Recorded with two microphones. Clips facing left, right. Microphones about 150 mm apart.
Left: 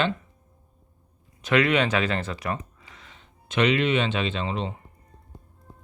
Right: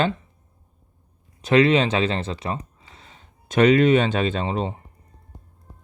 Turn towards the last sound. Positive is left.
turn(degrees=-35)  # may be behind; listen again after turning